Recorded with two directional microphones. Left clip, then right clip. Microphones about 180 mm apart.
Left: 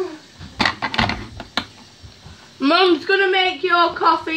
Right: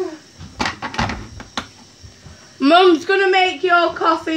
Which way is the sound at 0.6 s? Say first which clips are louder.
Left 3 dB; 45° left (ahead or behind).